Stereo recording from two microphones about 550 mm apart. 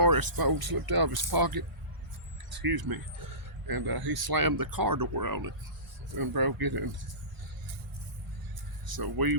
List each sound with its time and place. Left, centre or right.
0.0 s speech: right
8.9 s speech: right